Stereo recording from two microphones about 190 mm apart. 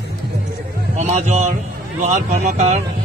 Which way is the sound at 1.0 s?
35° right (ahead or behind).